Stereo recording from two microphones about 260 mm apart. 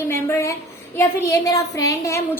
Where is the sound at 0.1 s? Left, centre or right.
Centre.